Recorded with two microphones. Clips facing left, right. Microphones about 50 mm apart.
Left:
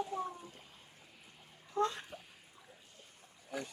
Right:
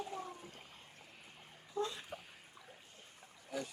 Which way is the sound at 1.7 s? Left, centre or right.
Left.